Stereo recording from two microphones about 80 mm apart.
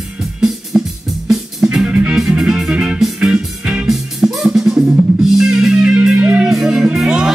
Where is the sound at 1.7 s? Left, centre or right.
Centre.